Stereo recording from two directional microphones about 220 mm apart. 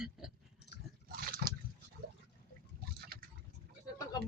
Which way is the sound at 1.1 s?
40° right (ahead or behind).